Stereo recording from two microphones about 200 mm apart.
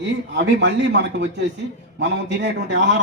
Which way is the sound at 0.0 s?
65° right (ahead or behind).